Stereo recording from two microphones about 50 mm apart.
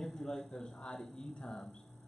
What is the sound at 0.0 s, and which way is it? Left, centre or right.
A man's voice, centre.